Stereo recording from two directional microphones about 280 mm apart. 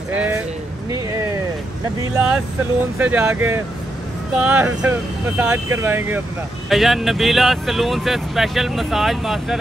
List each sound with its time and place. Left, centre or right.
0.1 s speech: centre
0.9 s a sound: centre
2.1 s speech: centre